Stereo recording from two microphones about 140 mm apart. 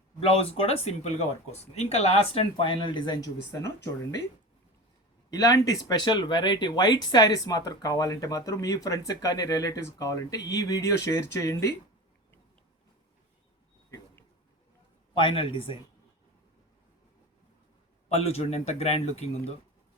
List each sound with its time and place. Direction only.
0.2 s speech: 45° left (ahead or behind)
5.3 s speech: 25° left (ahead or behind)
15.1 s a man's voice: 40° left (ahead or behind)
18.1 s speech: 45° left (ahead or behind)